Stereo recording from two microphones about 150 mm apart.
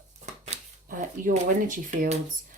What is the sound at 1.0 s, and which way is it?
Speech, 60° right (ahead or behind).